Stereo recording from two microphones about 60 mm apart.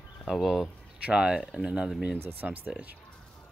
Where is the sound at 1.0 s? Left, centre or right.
Centre.